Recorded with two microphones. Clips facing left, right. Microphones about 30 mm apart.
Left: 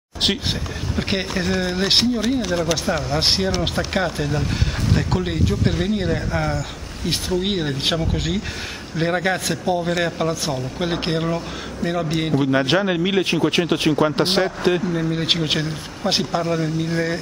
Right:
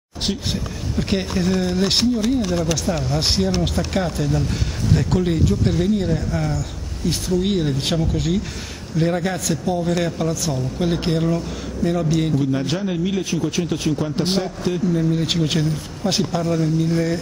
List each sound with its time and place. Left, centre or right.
0.5 s speech: left
12.4 s speech: left
14.9 s speech: left